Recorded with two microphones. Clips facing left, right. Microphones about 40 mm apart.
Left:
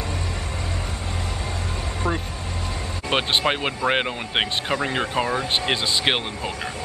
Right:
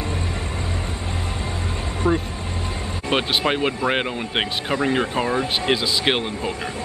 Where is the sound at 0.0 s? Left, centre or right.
Right.